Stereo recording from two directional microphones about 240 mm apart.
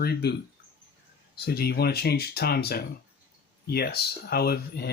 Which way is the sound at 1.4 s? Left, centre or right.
Left.